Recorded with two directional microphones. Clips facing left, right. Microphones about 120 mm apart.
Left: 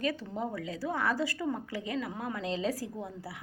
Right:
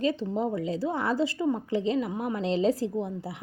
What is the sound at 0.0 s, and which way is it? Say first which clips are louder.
A woman's voice: right 6 dB; 25° right (ahead or behind).